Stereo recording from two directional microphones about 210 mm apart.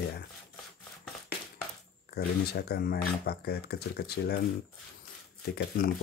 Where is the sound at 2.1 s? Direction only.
50° left (ahead or behind).